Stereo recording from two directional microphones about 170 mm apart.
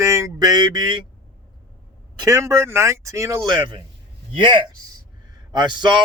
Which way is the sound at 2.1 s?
20° right (ahead or behind).